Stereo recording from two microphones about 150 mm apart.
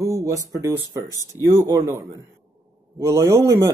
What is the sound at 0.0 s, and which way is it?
Speech, 20° right (ahead or behind).